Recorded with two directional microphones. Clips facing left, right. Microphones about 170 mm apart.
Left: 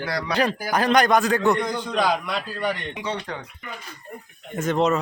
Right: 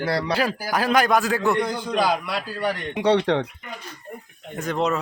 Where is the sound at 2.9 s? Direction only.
65° right (ahead or behind).